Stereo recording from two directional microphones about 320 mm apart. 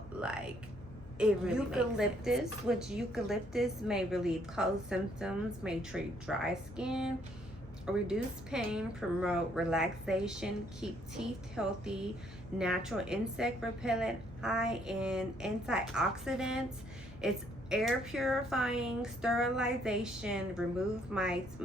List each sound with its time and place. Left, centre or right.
1.2 s a woman's voice: centre